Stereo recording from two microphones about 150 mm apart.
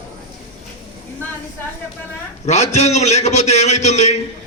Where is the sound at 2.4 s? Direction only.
50° left (ahead or behind).